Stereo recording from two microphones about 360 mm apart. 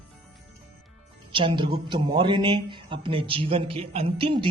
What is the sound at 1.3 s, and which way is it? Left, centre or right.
A man's voice, centre.